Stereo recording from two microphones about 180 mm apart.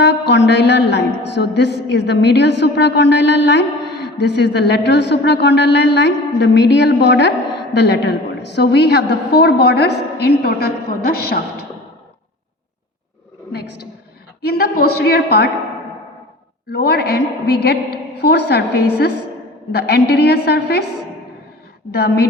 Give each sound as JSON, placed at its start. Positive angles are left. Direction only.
{"t": 0.0, "sound": "a man's voice", "side_deg": 70}
{"t": 14.4, "sound": "a man's voice", "side_deg": 60}
{"t": 16.6, "sound": "a man's voice", "side_deg": 60}
{"t": 21.9, "sound": "a man's voice", "side_deg": 60}